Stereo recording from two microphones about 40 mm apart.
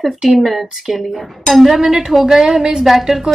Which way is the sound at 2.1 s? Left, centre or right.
Centre.